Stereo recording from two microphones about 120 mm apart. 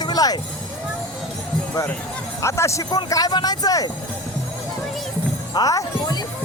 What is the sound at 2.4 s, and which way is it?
Speech, 25° left (ahead or behind).